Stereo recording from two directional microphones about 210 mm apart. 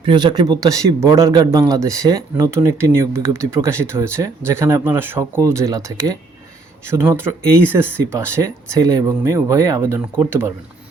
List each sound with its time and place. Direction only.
0.0 s speech: 20° right (ahead or behind)